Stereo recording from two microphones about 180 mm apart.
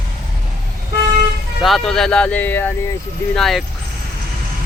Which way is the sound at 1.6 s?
Centre (ahead or behind).